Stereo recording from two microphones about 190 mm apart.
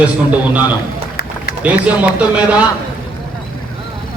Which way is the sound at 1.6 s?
5° right (ahead or behind).